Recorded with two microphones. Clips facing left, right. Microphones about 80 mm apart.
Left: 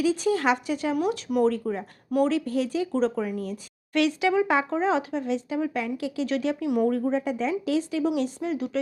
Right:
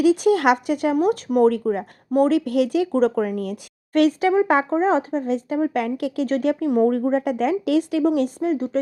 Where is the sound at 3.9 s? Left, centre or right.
Right.